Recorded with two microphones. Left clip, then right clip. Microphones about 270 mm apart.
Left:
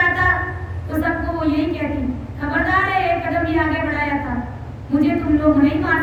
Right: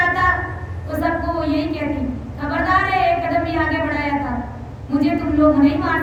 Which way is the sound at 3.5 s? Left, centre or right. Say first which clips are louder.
Even; centre.